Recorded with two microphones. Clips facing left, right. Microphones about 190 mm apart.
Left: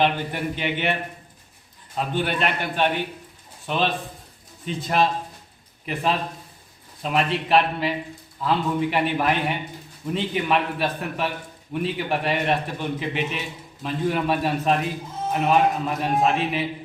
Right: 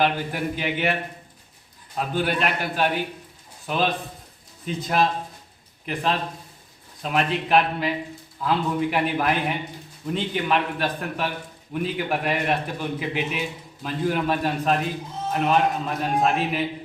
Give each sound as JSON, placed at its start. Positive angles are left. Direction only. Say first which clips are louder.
{"t": 0.0, "sound": "a man's voice", "louder": "left 1 dB", "side_deg": -5}
{"t": 2.0, "sound": "a man's voice", "louder": "even", "side_deg": -5}